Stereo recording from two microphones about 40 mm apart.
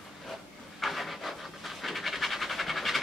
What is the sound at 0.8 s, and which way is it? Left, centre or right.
Pant, centre.